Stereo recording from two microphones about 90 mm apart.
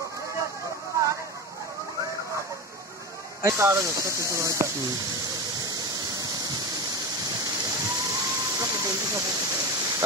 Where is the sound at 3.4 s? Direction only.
35° right (ahead or behind).